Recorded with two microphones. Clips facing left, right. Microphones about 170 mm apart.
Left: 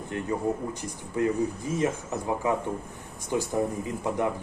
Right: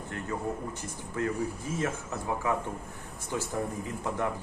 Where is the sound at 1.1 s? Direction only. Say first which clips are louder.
Left 5 dB; 15° left (ahead or behind).